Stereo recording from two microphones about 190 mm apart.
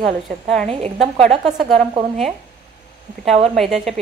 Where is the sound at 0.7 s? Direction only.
35° right (ahead or behind).